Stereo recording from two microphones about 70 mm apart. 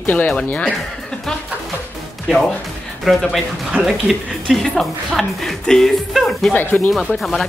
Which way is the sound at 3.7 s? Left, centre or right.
Centre.